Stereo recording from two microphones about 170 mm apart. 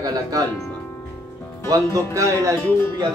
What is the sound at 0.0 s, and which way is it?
Speech, 20° right (ahead or behind).